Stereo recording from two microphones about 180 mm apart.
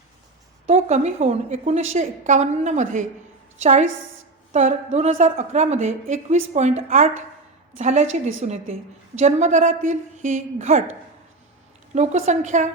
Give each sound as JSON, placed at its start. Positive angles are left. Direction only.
{"t": 0.7, "sound": "a woman's voice", "side_deg": -40}
{"t": 11.9, "sound": "a woman's voice", "side_deg": -40}